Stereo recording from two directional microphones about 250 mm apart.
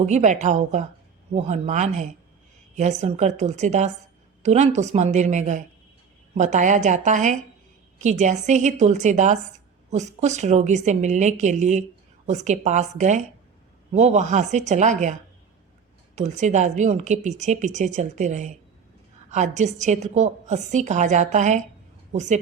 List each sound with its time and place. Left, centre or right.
0.0 s a woman's voice: right
16.1 s a woman's voice: right